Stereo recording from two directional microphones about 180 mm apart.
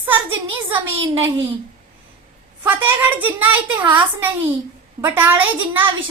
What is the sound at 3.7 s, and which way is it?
Speech, 25° right (ahead or behind).